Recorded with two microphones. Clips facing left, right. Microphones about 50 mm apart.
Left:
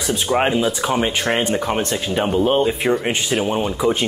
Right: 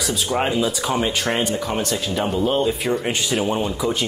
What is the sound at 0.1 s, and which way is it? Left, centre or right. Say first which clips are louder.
Speech: left 4 dB; left.